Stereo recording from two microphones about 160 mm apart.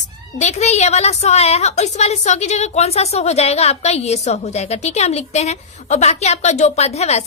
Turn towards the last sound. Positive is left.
turn(degrees=40)  # may be behind; listen again after turning